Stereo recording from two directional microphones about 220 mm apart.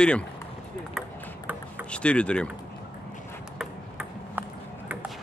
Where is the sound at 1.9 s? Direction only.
5° left (ahead or behind).